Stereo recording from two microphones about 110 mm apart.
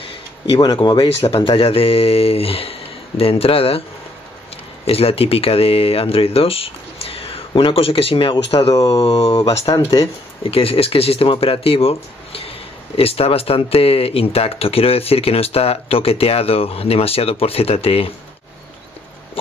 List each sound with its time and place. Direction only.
0.6 s speech: 40° left (ahead or behind)
1.0 s speech: 60° left (ahead or behind)
4.8 s speech: 65° left (ahead or behind)
9.7 s speech: 35° left (ahead or behind)
10.4 s speech: 60° left (ahead or behind)